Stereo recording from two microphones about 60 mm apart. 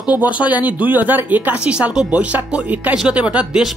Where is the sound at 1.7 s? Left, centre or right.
Centre.